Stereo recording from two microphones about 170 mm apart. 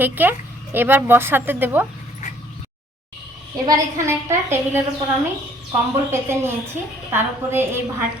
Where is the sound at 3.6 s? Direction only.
20° right (ahead or behind).